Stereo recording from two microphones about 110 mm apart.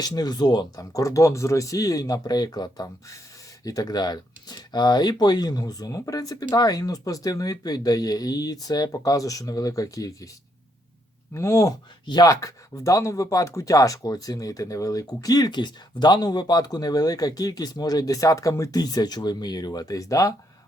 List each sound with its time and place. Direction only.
0.0 s speech: 35° left (ahead or behind)
11.3 s speech: 25° left (ahead or behind)
12.0 s speech: 40° left (ahead or behind)